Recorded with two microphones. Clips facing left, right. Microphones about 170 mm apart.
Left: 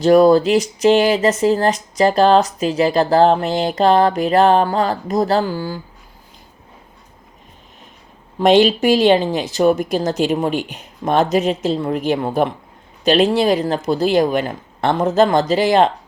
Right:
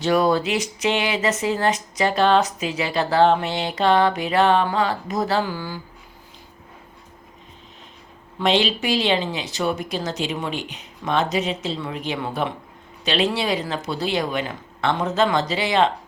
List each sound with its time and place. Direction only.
0.0 s speech: 40° left (ahead or behind)
8.4 s speech: 45° left (ahead or behind)